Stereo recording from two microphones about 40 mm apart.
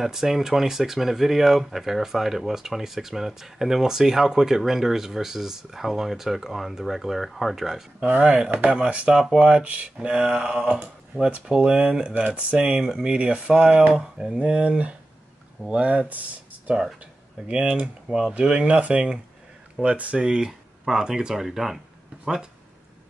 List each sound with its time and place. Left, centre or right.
0.0 s speech: centre
8.0 s speech: right
13.0 s speech: right
14.4 s speech: right
16.1 s speech: right
17.5 s speech: right
19.8 s speech: right
20.2 s speech: centre